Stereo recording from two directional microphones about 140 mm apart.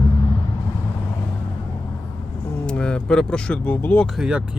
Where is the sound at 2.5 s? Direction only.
10° left (ahead or behind).